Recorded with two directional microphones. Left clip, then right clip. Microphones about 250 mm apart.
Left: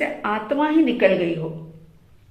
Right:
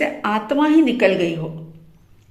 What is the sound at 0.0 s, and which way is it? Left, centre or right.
A woman's voice, right.